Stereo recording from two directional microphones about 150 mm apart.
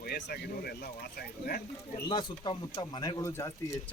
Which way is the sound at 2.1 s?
30° left (ahead or behind).